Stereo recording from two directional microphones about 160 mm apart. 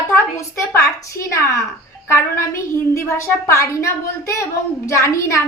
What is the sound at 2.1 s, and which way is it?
A woman's voice, 15° left (ahead or behind).